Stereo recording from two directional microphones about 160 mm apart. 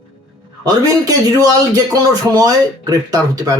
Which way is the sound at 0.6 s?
25° right (ahead or behind).